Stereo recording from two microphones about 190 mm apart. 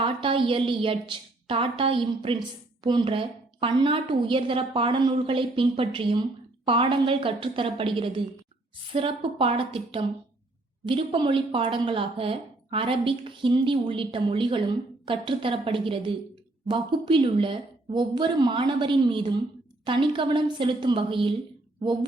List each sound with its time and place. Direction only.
0.0 s a woman's voice: 25° right (ahead or behind)